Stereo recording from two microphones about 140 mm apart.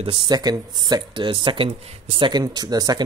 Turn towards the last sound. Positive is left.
turn(degrees=-30)  # may be behind; listen again after turning